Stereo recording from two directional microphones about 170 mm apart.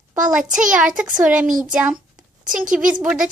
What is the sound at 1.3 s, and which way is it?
Speech, 50° right (ahead or behind).